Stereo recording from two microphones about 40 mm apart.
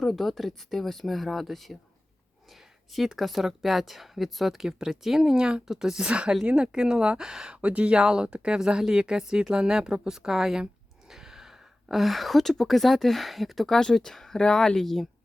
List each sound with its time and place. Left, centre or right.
0.0 s speech: centre
2.9 s speech: centre
6.1 s speech: right
7.5 s speech: right
7.9 s a woman's voice: right; by 13.7 s centre
13.7 s speech: centre